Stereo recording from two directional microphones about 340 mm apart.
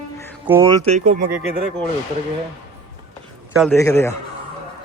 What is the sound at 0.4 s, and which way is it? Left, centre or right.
Speech, centre.